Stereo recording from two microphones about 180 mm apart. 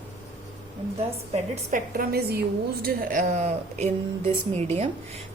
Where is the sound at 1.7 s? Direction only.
55° right (ahead or behind); by 4.6 s 40° right (ahead or behind).